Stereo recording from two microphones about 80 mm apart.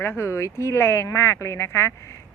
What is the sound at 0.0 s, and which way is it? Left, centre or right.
Speech, left.